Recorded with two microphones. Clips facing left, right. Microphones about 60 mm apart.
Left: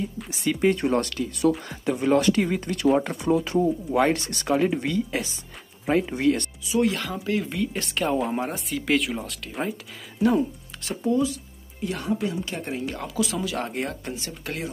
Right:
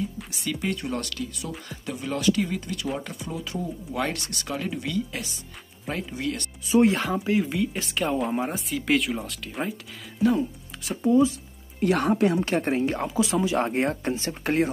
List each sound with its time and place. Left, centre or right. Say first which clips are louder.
0.5 s speech: left 7 dB; left
0.7 s speech: left 7 dB; left
3.9 s speech: left 4 dB; left
6.7 s speech: right 4 dB; right
7.4 s speech: right 1 dB; centre
11.0 s speech: right 4 dB; centre
11.8 s speech: right 6 dB; right
12.5 s speech: right 6 dB; right